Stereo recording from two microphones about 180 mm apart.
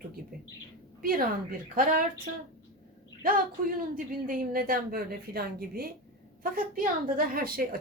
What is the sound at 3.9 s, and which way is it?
A woman's voice, 50° right (ahead or behind).